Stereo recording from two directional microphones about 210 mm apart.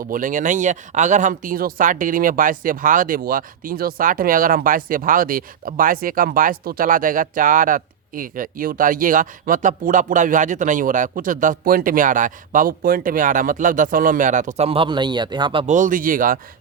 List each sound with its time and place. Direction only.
0.1 s speech: 40° right (ahead or behind); by 15.6 s 20° right (ahead or behind)
15.6 s speech: 35° right (ahead or behind)